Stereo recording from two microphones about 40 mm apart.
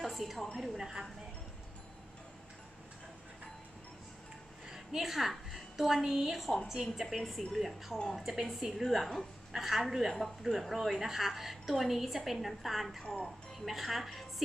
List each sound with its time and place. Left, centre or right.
0.0 s a sound: centre
0.5 s a woman's voice: centre
0.8 s a woman's voice: centre
4.7 s a woman's voice: centre
13.0 s a woman's voice: left
13.7 s a woman's voice: centre